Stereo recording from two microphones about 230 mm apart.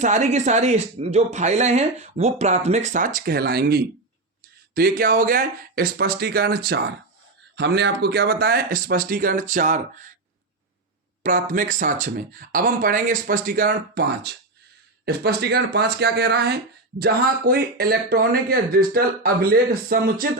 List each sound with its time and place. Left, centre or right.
0.0 s speech: right
11.2 s speech: right